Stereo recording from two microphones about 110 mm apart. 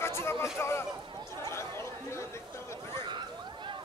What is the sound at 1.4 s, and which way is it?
Chatter, 25° left (ahead or behind).